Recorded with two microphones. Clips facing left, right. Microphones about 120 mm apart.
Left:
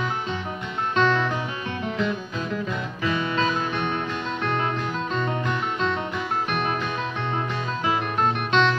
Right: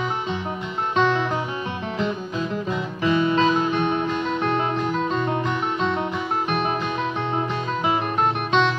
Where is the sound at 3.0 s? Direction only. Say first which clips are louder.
Right 6 dB; 25° right (ahead or behind).